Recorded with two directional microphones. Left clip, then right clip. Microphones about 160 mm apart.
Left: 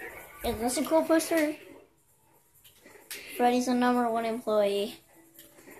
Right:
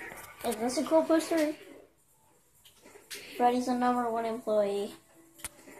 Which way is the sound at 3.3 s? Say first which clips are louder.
Left 1 dB; 20° left (ahead or behind).